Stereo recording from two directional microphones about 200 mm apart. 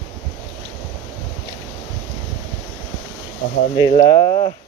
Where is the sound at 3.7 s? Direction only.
20° left (ahead or behind).